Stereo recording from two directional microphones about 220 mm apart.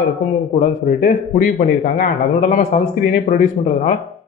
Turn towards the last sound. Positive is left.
turn(degrees=35)  # may be behind; listen again after turning